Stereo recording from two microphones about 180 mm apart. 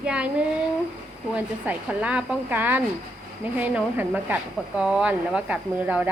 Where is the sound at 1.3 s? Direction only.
5° right (ahead or behind).